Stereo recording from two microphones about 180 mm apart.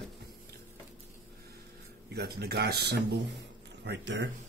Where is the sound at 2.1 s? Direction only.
60° right (ahead or behind).